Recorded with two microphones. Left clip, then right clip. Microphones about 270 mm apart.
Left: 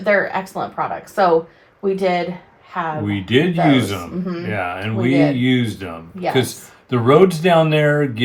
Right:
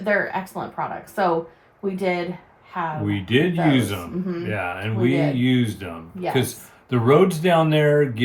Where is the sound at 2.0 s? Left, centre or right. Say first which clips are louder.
Left 4 dB; left.